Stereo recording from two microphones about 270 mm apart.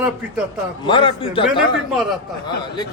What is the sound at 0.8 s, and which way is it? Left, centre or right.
Speech, centre.